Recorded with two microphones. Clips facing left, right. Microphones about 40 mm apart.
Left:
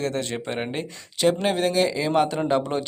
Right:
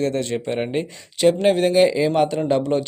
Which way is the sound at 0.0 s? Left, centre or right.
Centre.